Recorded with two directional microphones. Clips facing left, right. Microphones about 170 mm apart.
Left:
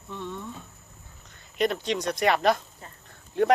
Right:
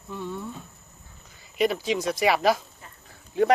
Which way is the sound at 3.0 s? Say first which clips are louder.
Right 1 dB; centre (ahead or behind).